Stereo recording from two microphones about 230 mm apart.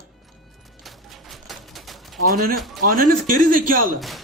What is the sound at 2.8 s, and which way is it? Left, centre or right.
Speech, right.